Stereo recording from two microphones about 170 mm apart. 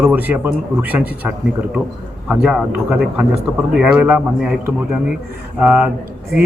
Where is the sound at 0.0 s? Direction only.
10° right (ahead or behind).